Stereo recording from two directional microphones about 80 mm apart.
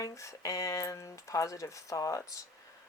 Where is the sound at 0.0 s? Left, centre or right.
Left.